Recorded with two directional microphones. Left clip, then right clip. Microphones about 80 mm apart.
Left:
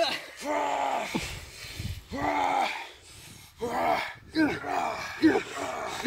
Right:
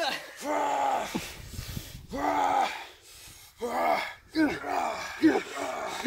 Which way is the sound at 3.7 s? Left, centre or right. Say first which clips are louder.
Even; right.